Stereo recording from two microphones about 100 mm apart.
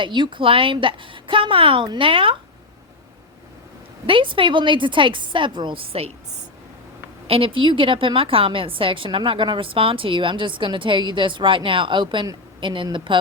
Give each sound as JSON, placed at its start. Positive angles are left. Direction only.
{"t": 0.0, "sound": "a woman's voice", "side_deg": -50}
{"t": 4.0, "sound": "a woman's voice", "side_deg": -60}
{"t": 7.3, "sound": "a woman's voice", "side_deg": -65}